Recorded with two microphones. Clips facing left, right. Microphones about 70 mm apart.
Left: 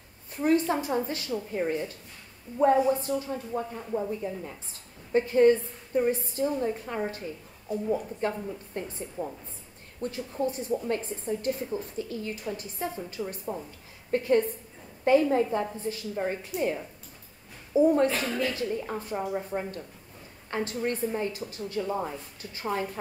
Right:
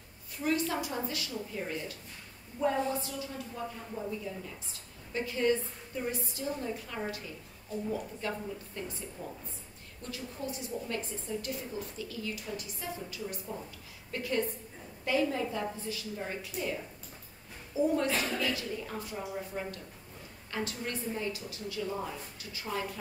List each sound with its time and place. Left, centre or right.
0.5 s a woman's voice: left
17.9 s a woman's voice: left